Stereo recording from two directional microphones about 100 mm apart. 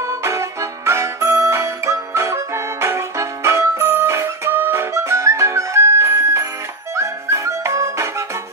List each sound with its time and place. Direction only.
0.0 s music: 30° right (ahead or behind)